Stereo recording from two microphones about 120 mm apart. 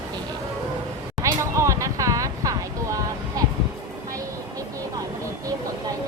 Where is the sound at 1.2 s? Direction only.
25° right (ahead or behind).